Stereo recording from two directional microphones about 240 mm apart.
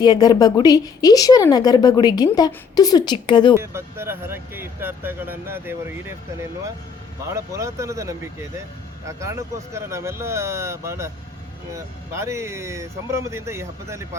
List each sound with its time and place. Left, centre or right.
0.0 s a woman's voice: centre
3.5 s speech: centre
7.3 s speech: centre